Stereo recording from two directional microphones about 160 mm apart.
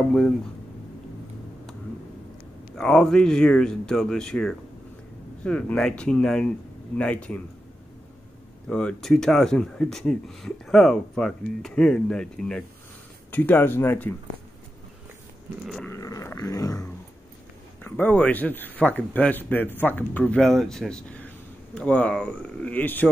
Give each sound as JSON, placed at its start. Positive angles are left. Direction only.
{"t": 2.8, "sound": "speech", "side_deg": 5}
{"t": 8.6, "sound": "speech", "side_deg": 5}
{"t": 15.6, "sound": "speech", "side_deg": 0}
{"t": 15.9, "sound": "a sound", "side_deg": 20}
{"t": 17.8, "sound": "speech", "side_deg": 10}